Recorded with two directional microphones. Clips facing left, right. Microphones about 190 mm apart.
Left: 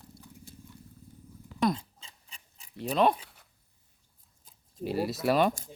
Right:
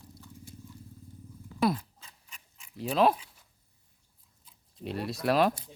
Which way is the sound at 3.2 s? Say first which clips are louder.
Left 3 dB; 65° left (ahead or behind).